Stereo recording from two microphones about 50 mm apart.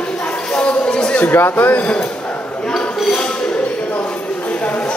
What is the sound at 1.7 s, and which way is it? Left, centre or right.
Speech, left.